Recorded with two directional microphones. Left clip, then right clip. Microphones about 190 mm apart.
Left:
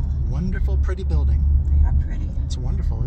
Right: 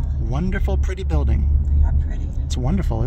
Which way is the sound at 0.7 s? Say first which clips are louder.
Right 4 dB; 40° right (ahead or behind).